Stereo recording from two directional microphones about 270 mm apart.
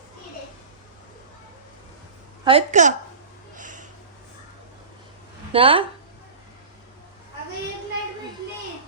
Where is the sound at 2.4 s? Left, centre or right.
Right.